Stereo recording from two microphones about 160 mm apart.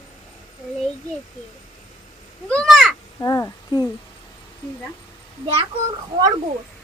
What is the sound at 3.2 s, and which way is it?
Speech, 20° left (ahead or behind).